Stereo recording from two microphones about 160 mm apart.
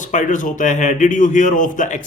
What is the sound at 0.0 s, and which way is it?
A man's voice, 50° left (ahead or behind).